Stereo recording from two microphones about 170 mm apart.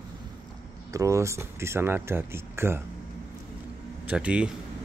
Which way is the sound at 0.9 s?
20° right (ahead or behind).